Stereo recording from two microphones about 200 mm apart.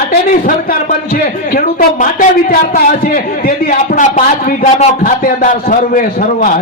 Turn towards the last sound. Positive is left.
turn(degrees=40)  # may be behind; listen again after turning